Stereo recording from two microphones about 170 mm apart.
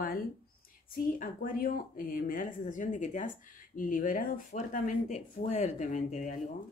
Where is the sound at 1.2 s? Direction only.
55° left (ahead or behind).